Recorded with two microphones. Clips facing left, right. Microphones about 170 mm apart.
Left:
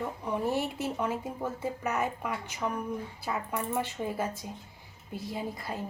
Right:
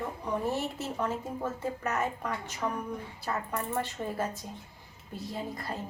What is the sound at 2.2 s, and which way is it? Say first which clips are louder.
A woman's voice: even; 5° left (ahead or behind).